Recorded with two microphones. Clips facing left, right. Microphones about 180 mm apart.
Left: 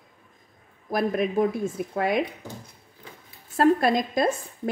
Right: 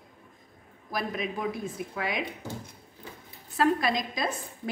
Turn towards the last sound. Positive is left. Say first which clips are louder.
# left 7 dB
turn(degrees=50)  # may be behind; listen again after turning